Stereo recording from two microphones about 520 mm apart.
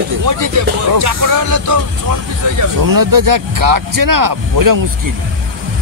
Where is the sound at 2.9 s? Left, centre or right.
Right.